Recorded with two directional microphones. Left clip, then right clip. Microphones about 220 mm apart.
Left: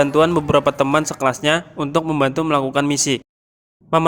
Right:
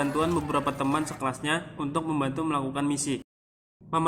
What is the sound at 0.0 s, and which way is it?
Speech, 45° left (ahead or behind).